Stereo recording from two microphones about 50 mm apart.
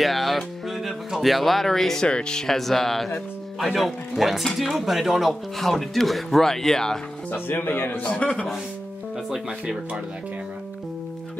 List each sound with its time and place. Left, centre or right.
0.0 s music: centre
2.0 s speech: centre
7.2 s speech: left
8.0 s a man's voice: left